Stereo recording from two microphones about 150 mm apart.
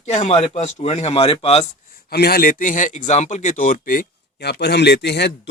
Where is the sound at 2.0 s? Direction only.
90° left.